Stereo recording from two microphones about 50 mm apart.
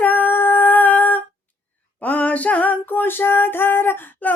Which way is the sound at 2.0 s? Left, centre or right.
Left.